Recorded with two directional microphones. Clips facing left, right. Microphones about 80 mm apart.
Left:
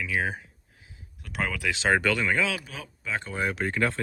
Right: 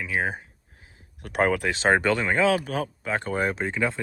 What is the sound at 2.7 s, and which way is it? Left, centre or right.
Speech, right.